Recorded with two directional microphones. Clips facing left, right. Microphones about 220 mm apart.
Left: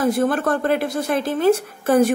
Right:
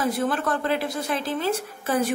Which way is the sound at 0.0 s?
50° left (ahead or behind).